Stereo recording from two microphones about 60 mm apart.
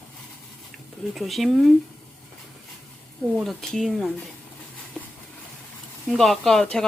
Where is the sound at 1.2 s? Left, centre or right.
Centre.